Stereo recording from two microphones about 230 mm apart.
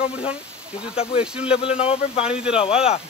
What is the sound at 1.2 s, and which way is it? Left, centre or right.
Speech, centre.